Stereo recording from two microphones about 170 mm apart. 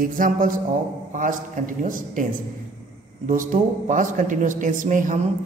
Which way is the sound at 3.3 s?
50° right (ahead or behind).